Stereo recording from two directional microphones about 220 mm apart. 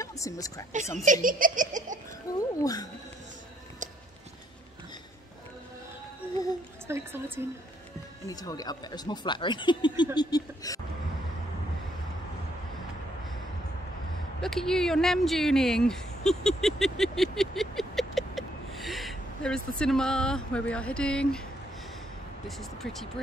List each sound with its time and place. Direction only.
0.0 s speech: 15° left (ahead or behind)
1.0 s laughter: 35° right (ahead or behind)
2.3 s speech: 15° left (ahead or behind)
6.9 s a woman's voice: 10° right (ahead or behind)
8.3 s speech: 15° left (ahead or behind)
10.1 s a sound: 15° left (ahead or behind)
14.4 s speech: centre (ahead or behind)
22.6 s speech: centre (ahead or behind)